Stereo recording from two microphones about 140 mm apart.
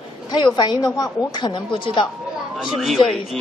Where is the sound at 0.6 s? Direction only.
30° left (ahead or behind).